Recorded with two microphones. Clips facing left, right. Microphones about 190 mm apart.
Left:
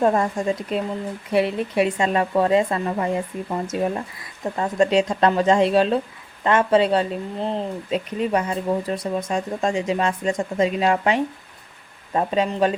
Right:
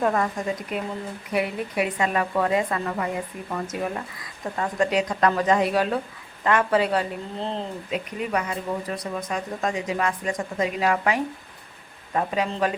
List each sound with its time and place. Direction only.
0.0 s speech: 30° left (ahead or behind)
7.9 s speech: 30° left (ahead or behind)